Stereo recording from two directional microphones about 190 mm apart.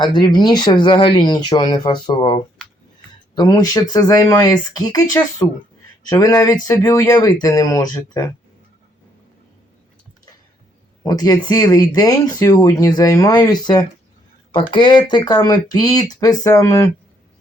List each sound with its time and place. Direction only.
0.0 s speech: 25° left (ahead or behind)
6.1 s speech: 15° left (ahead or behind)
11.0 s speech: 20° left (ahead or behind)